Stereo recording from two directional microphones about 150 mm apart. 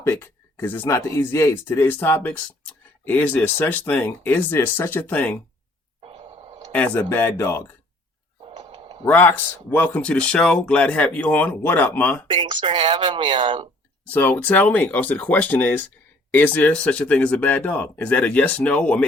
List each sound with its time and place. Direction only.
0.0 s speech: 15° left (ahead or behind)
6.0 s a sound: 40° right (ahead or behind)
6.7 s speech: 10° left (ahead or behind)
8.5 s a sound: 30° right (ahead or behind)
9.0 s speech: 10° left (ahead or behind)
12.3 s speech: 30° right (ahead or behind)
14.1 s speech: 10° left (ahead or behind)